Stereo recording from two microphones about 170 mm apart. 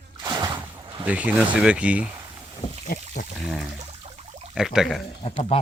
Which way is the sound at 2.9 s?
55° left (ahead or behind).